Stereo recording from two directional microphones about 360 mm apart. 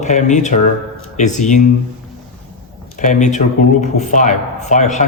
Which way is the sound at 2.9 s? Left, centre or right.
Centre.